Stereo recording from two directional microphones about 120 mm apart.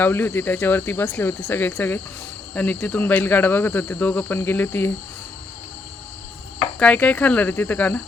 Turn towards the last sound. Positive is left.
turn(degrees=15)  # may be behind; listen again after turning